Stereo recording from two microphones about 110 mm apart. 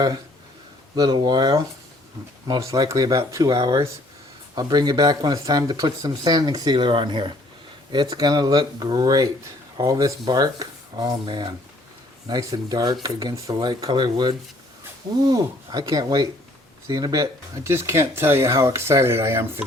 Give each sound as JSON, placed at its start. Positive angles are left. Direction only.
{"t": 0.9, "sound": "speech", "side_deg": -40}
{"t": 7.9, "sound": "speech", "side_deg": -35}